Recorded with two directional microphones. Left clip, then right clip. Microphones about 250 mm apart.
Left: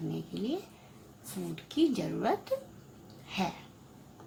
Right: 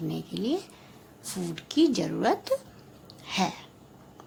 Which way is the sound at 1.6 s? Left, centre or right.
Right.